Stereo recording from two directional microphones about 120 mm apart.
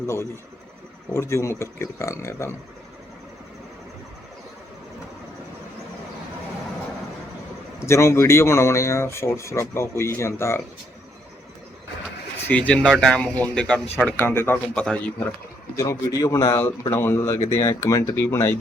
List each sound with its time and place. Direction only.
0.0 s speech: 25° left (ahead or behind)
7.9 s speech: 20° left (ahead or behind)
12.5 s speech: 10° left (ahead or behind)
15.7 s speech: 25° left (ahead or behind)